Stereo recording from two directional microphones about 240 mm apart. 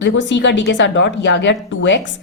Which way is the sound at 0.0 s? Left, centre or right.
Left.